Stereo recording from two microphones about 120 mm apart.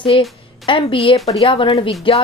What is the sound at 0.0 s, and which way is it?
A woman's voice, 50° left (ahead or behind).